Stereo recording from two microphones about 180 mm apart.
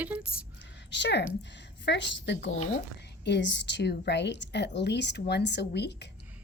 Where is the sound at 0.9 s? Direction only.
75° left (ahead or behind).